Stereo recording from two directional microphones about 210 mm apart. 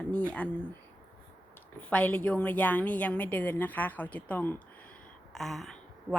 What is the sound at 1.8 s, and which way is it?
A woman's voice, 5° left (ahead or behind).